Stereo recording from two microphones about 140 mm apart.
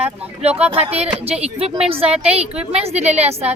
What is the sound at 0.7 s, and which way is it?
A woman's voice, 45° right (ahead or behind).